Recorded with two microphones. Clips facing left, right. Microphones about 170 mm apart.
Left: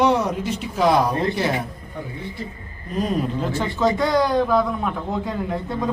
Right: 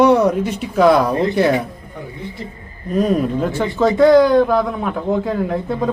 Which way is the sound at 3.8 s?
55° right (ahead or behind).